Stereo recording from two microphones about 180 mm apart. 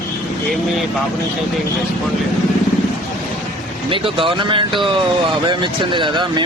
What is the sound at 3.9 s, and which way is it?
Speech, 30° right (ahead or behind).